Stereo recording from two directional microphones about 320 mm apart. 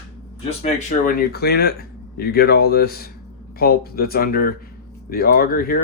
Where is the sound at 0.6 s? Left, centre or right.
Left.